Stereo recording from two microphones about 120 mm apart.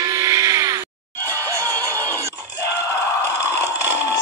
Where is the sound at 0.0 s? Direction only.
25° right (ahead or behind).